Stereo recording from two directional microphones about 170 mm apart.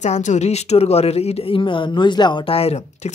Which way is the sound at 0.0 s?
45° left (ahead or behind).